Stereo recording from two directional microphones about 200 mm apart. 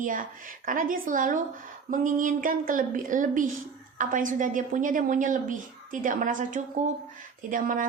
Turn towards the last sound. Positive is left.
turn(degrees=-40)  # may be behind; listen again after turning